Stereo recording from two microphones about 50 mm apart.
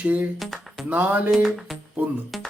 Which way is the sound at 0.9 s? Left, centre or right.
Right.